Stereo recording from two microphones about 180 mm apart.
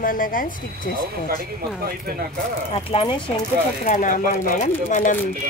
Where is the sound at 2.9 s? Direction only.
25° left (ahead or behind).